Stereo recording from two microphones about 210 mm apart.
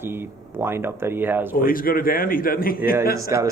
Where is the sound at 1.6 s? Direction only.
40° left (ahead or behind).